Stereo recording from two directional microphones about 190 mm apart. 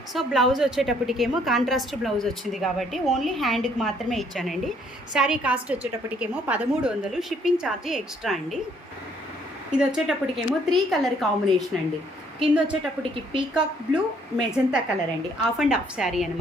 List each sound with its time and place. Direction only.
0.1 s a woman's voice: centre (ahead or behind)
9.7 s a woman's voice: centre (ahead or behind)